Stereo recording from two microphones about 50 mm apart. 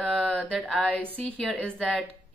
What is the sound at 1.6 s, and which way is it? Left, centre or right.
Speech, centre.